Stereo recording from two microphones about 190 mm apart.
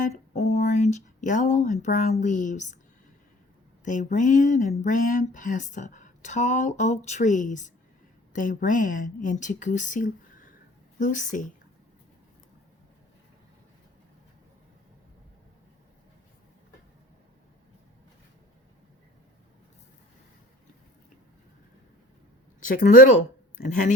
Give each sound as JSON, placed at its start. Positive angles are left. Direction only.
{"t": 0.3, "sound": "speech", "side_deg": 40}
{"t": 3.8, "sound": "a woman's voice", "side_deg": 40}
{"t": 22.6, "sound": "speech", "side_deg": 45}